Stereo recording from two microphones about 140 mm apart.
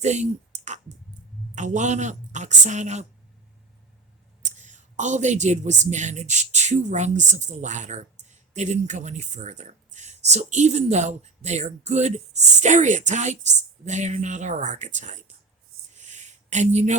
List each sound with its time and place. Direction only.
0.0 s a woman's voice: 55° right (ahead or behind)
4.5 s a woman's voice: 60° right (ahead or behind)
16.0 s a sound: 55° right (ahead or behind)